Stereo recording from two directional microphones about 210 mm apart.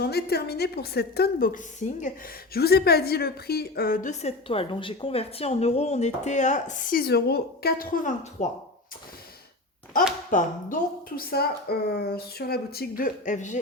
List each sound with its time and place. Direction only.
0.0 s a woman's voice: 50° left (ahead or behind)
10.3 s a woman's voice: 40° left (ahead or behind)